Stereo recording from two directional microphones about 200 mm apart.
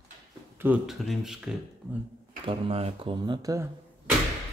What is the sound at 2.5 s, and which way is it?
Speech, 30° right (ahead or behind).